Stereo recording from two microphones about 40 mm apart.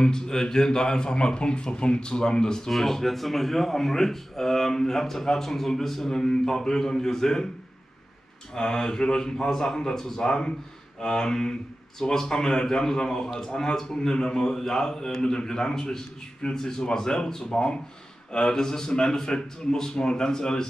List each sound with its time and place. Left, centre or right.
0.0 s speech: centre
2.7 s a man's voice: centre
8.5 s a man's voice: centre